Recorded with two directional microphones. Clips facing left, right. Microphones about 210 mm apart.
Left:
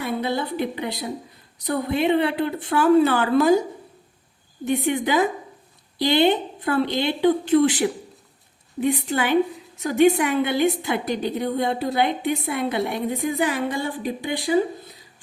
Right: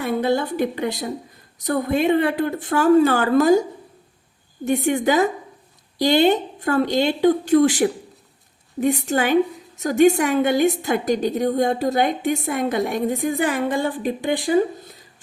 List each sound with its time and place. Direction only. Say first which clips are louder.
0.0 s a woman's voice: right 4 dB; 50° right (ahead or behind)
4.6 s a woman's voice: right 3 dB; 45° right (ahead or behind)